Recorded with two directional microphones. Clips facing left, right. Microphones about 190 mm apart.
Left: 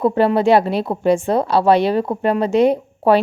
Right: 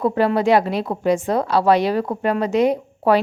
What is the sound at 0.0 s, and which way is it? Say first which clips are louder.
A woman's voice: left 3 dB; 25° left (ahead or behind).